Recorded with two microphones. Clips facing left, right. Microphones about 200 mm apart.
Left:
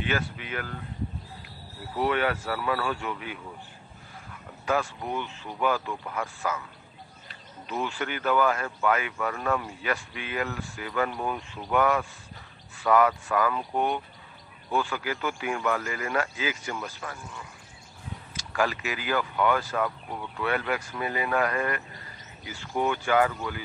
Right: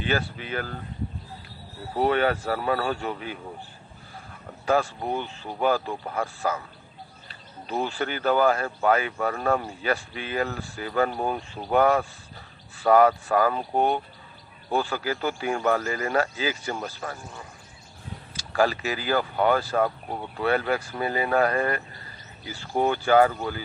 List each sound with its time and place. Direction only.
0.0 s speech: 35° right (ahead or behind)
2.0 s speech: 35° right (ahead or behind)